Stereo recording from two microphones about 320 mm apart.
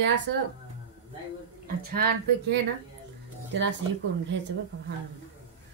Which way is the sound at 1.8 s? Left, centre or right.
Right.